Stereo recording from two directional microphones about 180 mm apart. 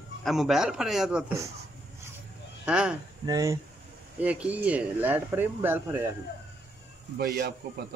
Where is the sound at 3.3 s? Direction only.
20° right (ahead or behind).